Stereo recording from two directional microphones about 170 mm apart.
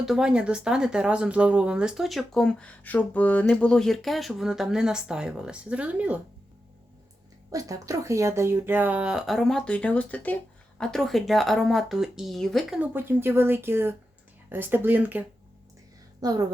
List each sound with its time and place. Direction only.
0.0 s speech: 5° right (ahead or behind)
7.5 s speech: 20° right (ahead or behind); by 12.8 s centre (ahead or behind)
12.8 s speech: 10° right (ahead or behind)
16.2 s a woman's voice: 20° right (ahead or behind)